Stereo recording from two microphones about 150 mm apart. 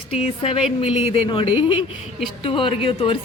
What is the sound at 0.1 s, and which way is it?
A woman's voice, 40° left (ahead or behind).